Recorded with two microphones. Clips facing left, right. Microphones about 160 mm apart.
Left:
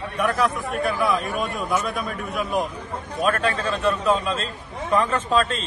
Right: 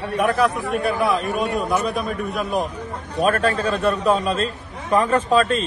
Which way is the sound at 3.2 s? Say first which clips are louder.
Right 4 dB; 35° right (ahead or behind).